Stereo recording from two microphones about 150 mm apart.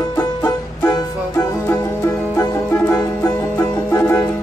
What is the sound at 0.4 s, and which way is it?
Music, 15° left (ahead or behind).